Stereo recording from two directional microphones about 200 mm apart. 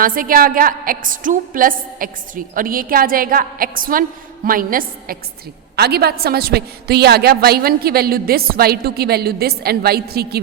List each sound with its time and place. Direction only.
0.0 s a woman's voice: 45° right (ahead or behind)